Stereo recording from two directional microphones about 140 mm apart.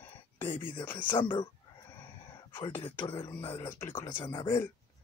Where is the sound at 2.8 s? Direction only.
35° left (ahead or behind).